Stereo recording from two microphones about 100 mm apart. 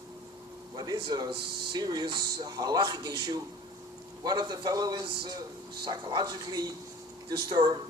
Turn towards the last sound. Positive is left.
turn(degrees=-45)  # may be behind; listen again after turning